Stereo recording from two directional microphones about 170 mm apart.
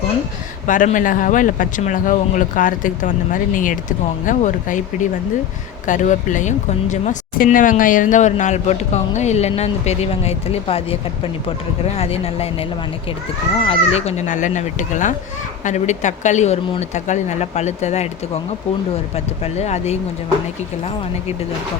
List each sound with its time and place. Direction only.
0.7 s speech: 50° left (ahead or behind)
13.7 s speech: 40° left (ahead or behind)
19.1 s speech: 40° left (ahead or behind)